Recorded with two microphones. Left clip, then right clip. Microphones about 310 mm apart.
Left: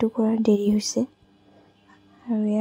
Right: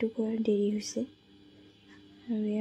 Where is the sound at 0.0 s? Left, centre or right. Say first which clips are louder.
Left 8 dB; centre.